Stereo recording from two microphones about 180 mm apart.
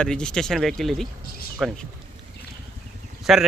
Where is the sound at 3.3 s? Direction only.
Centre (ahead or behind).